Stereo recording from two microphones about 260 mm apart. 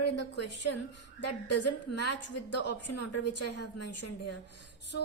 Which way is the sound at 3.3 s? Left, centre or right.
Left.